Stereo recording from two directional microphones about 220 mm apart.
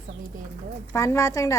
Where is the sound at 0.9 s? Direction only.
15° left (ahead or behind).